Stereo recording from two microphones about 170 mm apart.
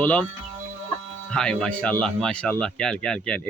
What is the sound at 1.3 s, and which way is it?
Speech, 5° left (ahead or behind).